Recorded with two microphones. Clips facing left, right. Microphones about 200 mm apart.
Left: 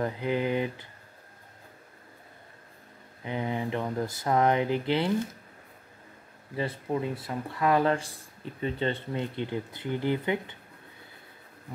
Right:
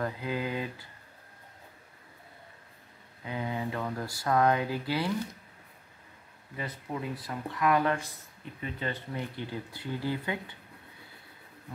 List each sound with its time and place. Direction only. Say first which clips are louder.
0.0 s speech: left 4 dB; 20° left (ahead or behind)
3.3 s speech: left 3 dB; 20° left (ahead or behind)
6.5 s speech: left 7 dB; 30° left (ahead or behind)